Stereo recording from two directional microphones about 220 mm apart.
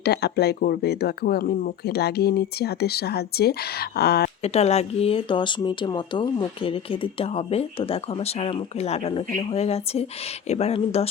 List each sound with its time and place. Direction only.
0.0 s speech: 50° left (ahead or behind)
4.4 s speech: 30° left (ahead or behind)